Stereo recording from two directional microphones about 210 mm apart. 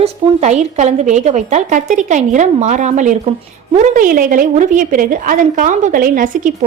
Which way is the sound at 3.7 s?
40° right (ahead or behind).